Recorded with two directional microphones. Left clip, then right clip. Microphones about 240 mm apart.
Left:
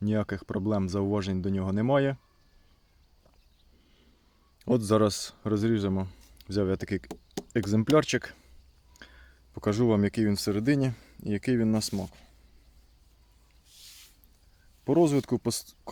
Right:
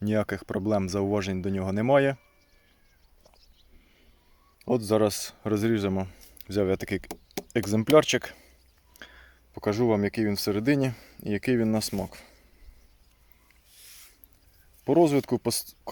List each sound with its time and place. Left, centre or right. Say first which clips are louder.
0.0 s speech: right 3 dB; centre
4.6 s speech: right 1 dB; centre
12.0 s speech: right 5 dB; centre
14.8 s speech: right 2 dB; centre